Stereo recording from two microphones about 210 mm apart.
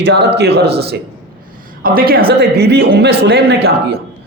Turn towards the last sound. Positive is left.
turn(degrees=-50)  # may be behind; listen again after turning